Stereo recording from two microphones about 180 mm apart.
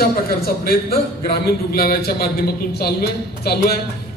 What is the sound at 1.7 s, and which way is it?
Speech, 55° left (ahead or behind).